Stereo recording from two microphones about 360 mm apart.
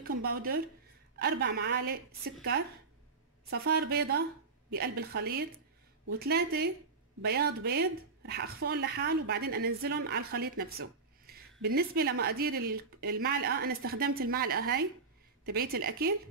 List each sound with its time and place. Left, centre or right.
0.0 s speech: right
3.4 s speech: right